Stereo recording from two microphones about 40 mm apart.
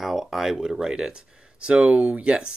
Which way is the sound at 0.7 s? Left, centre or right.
Centre.